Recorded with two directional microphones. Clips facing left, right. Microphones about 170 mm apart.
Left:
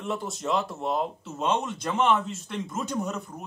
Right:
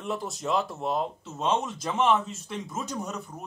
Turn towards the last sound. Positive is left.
turn(degrees=0)  # may be behind; listen again after turning